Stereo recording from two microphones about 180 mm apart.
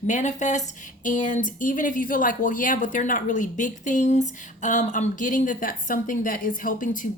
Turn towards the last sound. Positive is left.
turn(degrees=50)  # may be behind; listen again after turning